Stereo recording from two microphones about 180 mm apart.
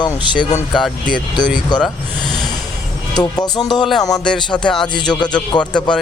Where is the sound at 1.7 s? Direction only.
5° left (ahead or behind).